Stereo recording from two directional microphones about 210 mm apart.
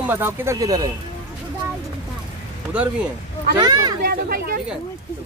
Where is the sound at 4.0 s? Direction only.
45° right (ahead or behind).